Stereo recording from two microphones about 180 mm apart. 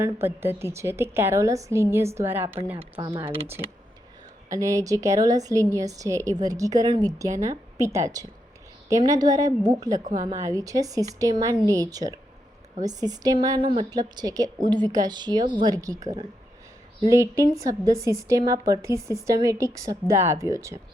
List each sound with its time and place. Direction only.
0.0 s a woman's voice: 15° right (ahead or behind)
3.0 s a woman's voice: 25° right (ahead or behind)
4.4 s a woman's voice: 20° right (ahead or behind)
10.0 s a woman's voice: 40° right (ahead or behind)
10.4 s a woman's voice: 20° right (ahead or behind)
17.1 s a woman's voice: 15° right (ahead or behind)